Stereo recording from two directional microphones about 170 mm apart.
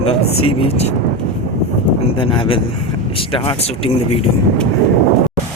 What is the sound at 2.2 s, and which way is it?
Speech, 30° left (ahead or behind).